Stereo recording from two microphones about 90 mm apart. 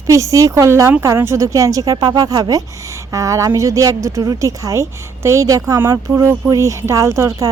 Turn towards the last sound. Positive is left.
turn(degrees=-35)  # may be behind; listen again after turning